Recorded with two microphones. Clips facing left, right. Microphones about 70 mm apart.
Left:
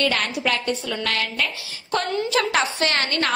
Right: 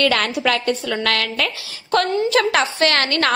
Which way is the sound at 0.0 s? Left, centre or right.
Right.